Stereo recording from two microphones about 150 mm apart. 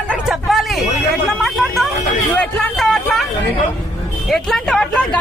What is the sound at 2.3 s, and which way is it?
Vehicle, 5° left (ahead or behind).